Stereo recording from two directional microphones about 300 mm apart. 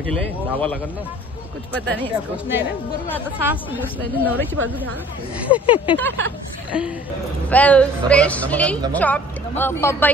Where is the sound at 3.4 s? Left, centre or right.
Centre.